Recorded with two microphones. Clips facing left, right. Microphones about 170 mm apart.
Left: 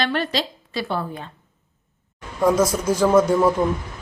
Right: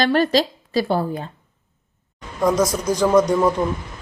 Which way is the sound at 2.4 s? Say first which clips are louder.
Even; 5° left (ahead or behind).